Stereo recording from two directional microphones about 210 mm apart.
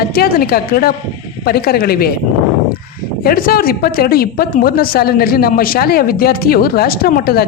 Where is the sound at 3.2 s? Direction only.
45° left (ahead or behind).